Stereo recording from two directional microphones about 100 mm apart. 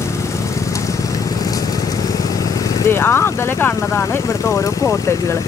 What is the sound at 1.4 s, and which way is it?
Vehicle, 40° left (ahead or behind).